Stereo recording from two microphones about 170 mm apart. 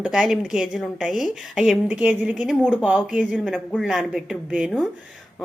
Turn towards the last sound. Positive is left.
turn(degrees=0)  # may be behind; listen again after turning